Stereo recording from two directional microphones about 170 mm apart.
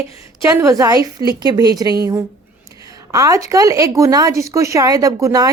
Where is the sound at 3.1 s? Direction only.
20° right (ahead or behind).